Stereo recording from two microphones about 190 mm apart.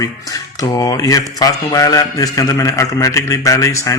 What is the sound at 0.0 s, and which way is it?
Speech, 20° left (ahead or behind).